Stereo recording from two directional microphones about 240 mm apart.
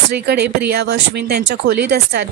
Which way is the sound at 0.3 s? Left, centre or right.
Right.